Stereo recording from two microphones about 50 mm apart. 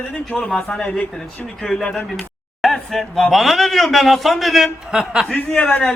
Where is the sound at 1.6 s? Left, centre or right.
Centre.